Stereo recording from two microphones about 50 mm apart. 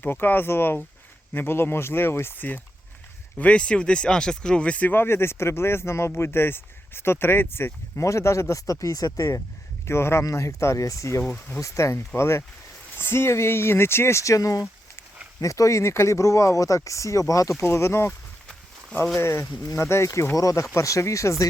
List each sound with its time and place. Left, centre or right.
0.0 s speech: left
3.3 s speech: left
4.9 s speech: left
6.1 s speech: left
7.9 s speech: left
9.8 s speech: left
17.6 s speech: left
19.2 s speech: left
20.4 s speech: left